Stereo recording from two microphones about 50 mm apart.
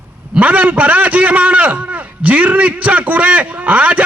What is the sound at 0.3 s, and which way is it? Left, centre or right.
A man's voice, right.